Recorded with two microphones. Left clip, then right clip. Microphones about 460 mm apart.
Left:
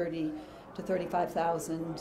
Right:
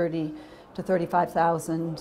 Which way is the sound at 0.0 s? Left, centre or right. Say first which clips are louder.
Right 6 dB; right.